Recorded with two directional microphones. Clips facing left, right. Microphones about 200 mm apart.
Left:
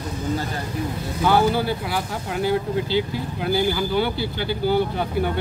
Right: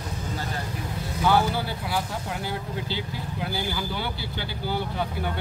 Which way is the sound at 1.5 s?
85° left.